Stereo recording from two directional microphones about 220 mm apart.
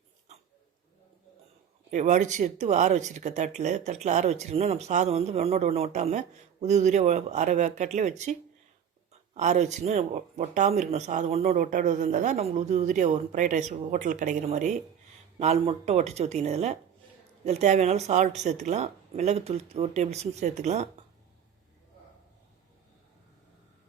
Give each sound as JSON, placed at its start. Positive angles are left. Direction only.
{"t": 1.9, "sound": "speech", "side_deg": -35}